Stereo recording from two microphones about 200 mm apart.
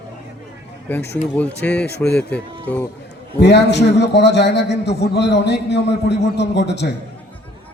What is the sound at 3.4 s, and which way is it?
A man's voice, 60° left (ahead or behind).